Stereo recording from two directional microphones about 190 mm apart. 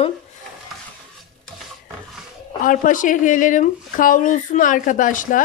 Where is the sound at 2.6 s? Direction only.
45° left (ahead or behind).